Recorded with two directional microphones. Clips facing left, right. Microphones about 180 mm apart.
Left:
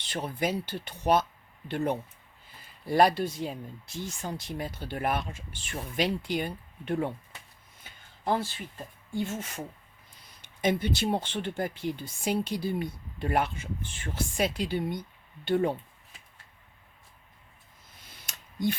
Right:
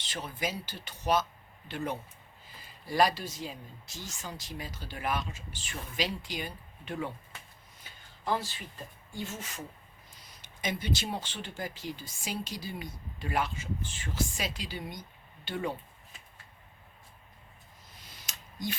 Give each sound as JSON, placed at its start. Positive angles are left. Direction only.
{"t": 0.0, "sound": "speech", "side_deg": 55}
{"t": 9.1, "sound": "speech", "side_deg": 55}
{"t": 17.9, "sound": "a sound", "side_deg": 55}